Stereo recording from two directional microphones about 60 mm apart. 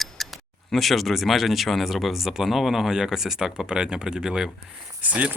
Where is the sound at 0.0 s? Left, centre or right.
Centre.